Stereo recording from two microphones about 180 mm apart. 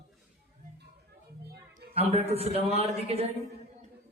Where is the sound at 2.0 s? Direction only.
35° right (ahead or behind).